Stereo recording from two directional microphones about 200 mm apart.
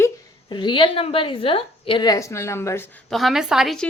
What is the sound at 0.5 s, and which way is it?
A woman's voice, 25° left (ahead or behind).